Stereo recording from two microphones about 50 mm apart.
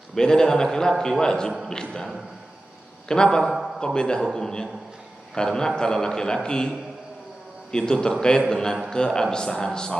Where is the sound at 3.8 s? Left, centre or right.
Centre.